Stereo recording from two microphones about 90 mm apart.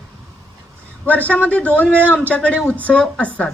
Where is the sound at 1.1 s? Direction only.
15° left (ahead or behind).